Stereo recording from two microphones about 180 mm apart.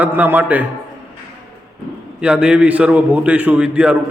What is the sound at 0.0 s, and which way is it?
Speech, 10° right (ahead or behind).